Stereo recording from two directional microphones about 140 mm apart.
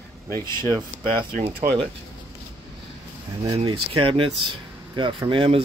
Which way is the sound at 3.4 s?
40° right (ahead or behind).